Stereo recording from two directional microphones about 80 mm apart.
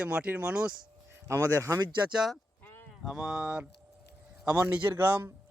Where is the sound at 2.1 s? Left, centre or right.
Centre.